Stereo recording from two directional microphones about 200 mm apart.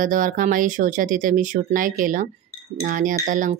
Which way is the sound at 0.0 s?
40° right (ahead or behind).